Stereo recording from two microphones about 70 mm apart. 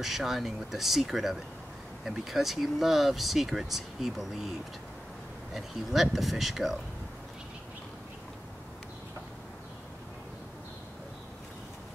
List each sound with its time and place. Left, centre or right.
0.0 s speech: centre
5.5 s speech: centre